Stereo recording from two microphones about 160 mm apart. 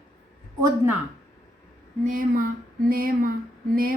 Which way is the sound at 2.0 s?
60° right (ahead or behind).